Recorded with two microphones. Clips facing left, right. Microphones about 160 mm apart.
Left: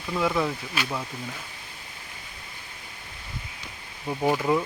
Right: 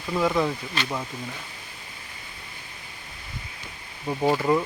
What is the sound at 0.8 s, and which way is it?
Speech, 10° left (ahead or behind).